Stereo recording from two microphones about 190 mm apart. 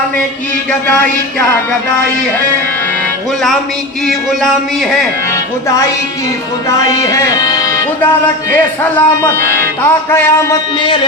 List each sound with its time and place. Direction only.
4.0 s music: centre (ahead or behind)
6.7 s music: 15° left (ahead or behind)
10.8 s speech: 25° left (ahead or behind)